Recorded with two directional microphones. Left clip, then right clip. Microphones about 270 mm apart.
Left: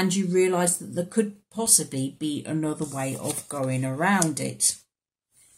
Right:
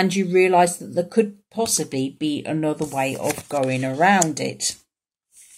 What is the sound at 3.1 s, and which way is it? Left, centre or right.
Speech, right.